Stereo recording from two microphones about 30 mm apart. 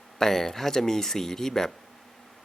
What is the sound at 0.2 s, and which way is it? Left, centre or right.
Speech, centre.